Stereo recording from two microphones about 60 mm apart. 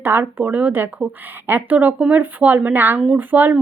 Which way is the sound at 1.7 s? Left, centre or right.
Right.